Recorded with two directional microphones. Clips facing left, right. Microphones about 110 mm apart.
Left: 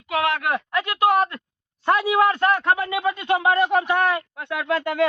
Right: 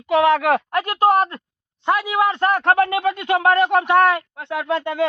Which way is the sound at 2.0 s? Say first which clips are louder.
Left 1 dB; centre (ahead or behind).